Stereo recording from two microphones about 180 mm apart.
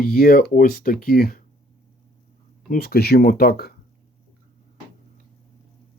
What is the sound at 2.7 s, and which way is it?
Speech, 60° left (ahead or behind).